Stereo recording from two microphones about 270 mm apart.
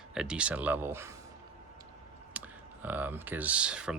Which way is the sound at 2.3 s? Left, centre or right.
Centre.